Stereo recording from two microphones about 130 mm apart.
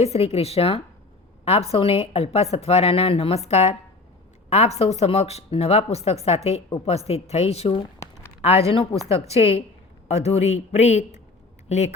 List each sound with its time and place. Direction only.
0.0 s a woman's voice: 55° left (ahead or behind)